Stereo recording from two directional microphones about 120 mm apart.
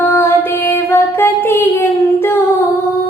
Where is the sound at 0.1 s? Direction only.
20° left (ahead or behind).